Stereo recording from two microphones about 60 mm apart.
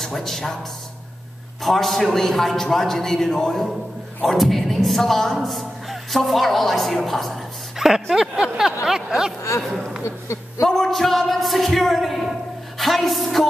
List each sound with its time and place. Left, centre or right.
0.0 s speech: centre
1.6 s a woman's voice: centre
7.8 s a sound: centre
10.0 s speech: left
10.7 s a woman's voice: centre
12.7 s music: centre